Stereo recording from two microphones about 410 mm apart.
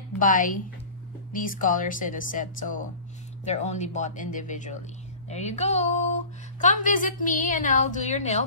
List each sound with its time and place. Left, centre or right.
0.2 s speech: centre